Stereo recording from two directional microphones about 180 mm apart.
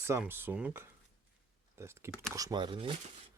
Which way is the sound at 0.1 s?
10° right (ahead or behind).